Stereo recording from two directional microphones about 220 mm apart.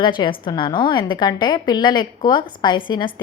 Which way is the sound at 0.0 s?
20° left (ahead or behind).